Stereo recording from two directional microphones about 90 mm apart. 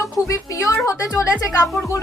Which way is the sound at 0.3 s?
40° left (ahead or behind).